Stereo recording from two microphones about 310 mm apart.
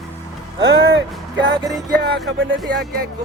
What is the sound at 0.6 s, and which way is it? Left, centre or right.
Music, right.